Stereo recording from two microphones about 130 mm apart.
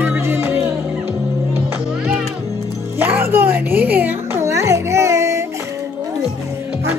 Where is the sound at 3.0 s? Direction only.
15° right (ahead or behind).